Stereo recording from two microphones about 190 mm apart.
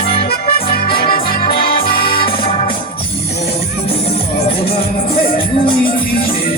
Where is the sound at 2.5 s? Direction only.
30° left (ahead or behind).